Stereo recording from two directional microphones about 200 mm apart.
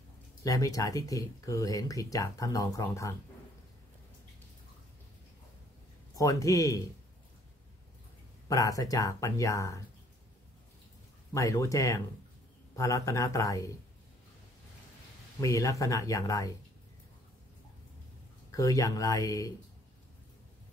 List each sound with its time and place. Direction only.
0.4 s speech: 15° left (ahead or behind)
6.1 s speech: 15° left (ahead or behind)
8.5 s speech: 15° left (ahead or behind)
11.3 s speech: 15° left (ahead or behind)
15.4 s speech: 15° left (ahead or behind)
18.5 s speech: 15° left (ahead or behind)